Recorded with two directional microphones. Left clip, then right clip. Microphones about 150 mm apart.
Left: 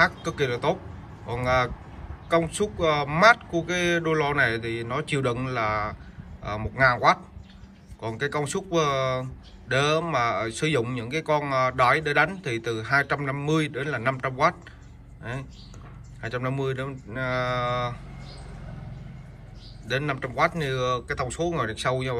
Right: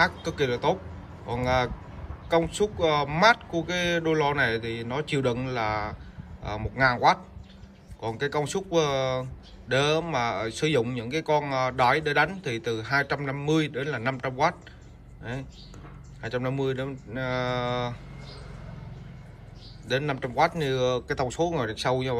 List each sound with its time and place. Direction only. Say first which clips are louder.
0.0 s a man's voice: left 2 dB; 10° right (ahead or behind)
16.2 s a man's voice: even; 15° right (ahead or behind)
19.9 s a man's voice: even; 15° right (ahead or behind)